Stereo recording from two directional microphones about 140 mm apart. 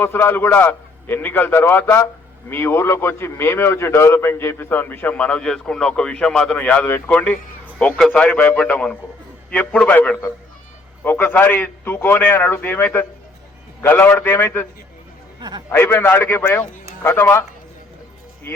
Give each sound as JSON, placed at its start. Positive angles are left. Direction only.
{"t": 0.0, "sound": "a man's voice", "side_deg": 15}
{"t": 15.4, "sound": "a man's voice", "side_deg": -30}
{"t": 15.7, "sound": "a man's voice", "side_deg": 15}